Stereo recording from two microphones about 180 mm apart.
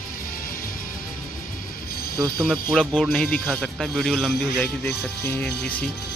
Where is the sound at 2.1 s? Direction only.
20° right (ahead or behind).